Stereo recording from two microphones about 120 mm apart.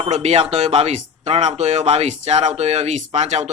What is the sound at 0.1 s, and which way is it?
Speech, 65° right (ahead or behind).